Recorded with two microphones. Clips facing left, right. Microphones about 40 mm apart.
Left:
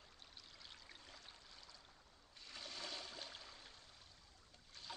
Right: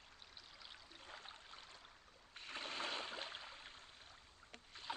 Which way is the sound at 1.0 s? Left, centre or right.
Right.